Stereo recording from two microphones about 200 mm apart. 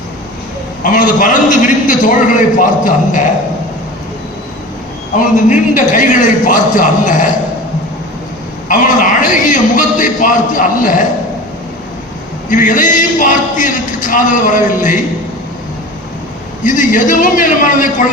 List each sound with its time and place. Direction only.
0.8 s a man's voice: 40° left (ahead or behind)
5.1 s a man's voice: 40° left (ahead or behind)
8.7 s a man's voice: 40° left (ahead or behind)
12.5 s a man's voice: 40° left (ahead or behind)
16.6 s a man's voice: 40° left (ahead or behind)